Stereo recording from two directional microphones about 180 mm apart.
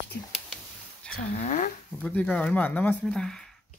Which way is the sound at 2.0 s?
10° left (ahead or behind).